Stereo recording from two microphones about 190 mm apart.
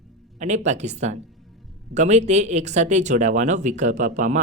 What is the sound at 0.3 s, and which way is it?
Speech, 40° right (ahead or behind).